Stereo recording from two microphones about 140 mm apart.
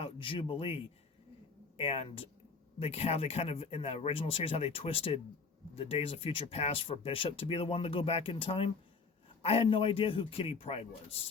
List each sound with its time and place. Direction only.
0.0 s a man's voice: 40° left (ahead or behind)